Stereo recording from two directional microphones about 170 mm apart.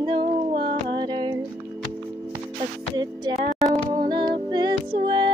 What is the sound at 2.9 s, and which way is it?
Music, 25° right (ahead or behind).